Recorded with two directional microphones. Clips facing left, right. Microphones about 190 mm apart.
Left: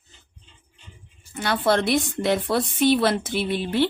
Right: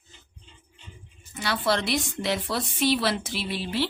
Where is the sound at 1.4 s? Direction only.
50° left (ahead or behind).